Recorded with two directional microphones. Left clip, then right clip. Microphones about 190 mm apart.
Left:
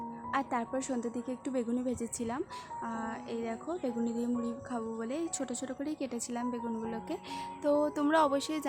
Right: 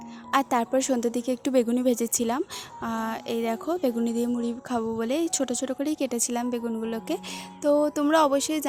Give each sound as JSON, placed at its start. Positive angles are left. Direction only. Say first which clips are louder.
{"t": 0.3, "sound": "a woman's voice", "louder": "right 10 dB", "side_deg": -45}